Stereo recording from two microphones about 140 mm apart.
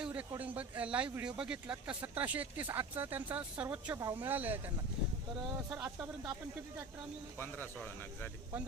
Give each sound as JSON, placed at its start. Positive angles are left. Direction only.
{"t": 0.0, "sound": "a sound", "side_deg": -10}
{"t": 0.3, "sound": "speech", "side_deg": -10}
{"t": 5.7, "sound": "speech", "side_deg": -5}
{"t": 7.3, "sound": "speech", "side_deg": 15}